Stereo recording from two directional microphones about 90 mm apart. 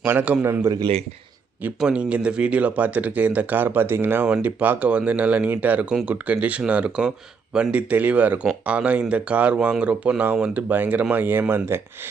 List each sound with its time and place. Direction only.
0.0 s speech: 20° right (ahead or behind)
1.8 s speech: 10° right (ahead or behind)